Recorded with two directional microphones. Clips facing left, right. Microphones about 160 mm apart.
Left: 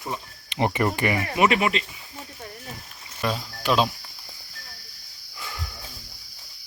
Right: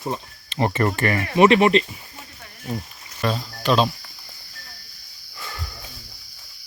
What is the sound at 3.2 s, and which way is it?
Speech, 10° left (ahead or behind).